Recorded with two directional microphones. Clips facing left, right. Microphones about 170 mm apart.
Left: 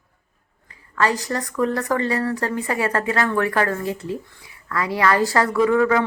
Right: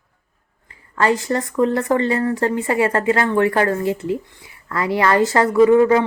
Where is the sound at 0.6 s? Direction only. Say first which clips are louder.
Right 3 dB; 30° right (ahead or behind).